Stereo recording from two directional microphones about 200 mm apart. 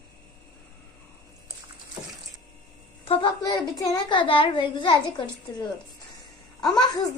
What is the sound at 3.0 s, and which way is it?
A child's voice, 20° left (ahead or behind).